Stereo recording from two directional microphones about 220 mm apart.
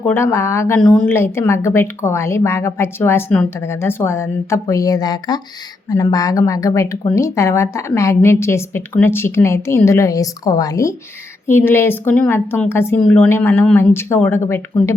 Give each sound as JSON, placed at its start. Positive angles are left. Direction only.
{"t": 0.1, "sound": "speech", "side_deg": 10}